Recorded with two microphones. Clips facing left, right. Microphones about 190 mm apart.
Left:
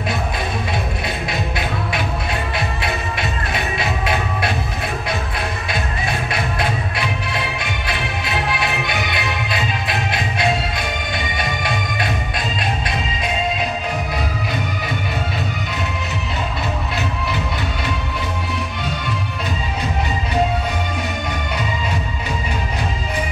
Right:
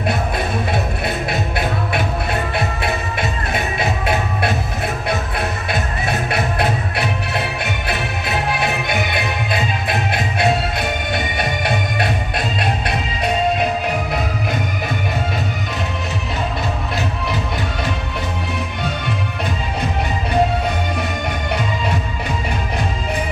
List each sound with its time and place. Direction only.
1.0 s music: 50° right (ahead or behind)
5.7 s music: 55° right (ahead or behind)